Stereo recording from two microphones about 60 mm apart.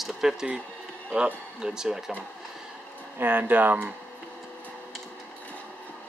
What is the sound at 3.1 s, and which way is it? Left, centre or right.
Speech, right.